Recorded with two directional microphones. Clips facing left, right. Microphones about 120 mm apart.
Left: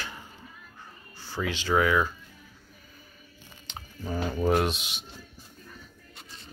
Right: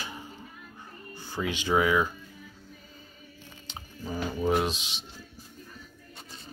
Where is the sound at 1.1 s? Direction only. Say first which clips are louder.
Even; 15° right (ahead or behind).